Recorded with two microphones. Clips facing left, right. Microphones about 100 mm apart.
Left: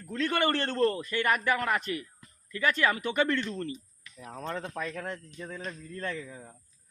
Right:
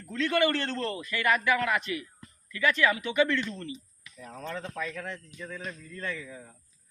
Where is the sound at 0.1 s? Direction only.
40° left (ahead or behind).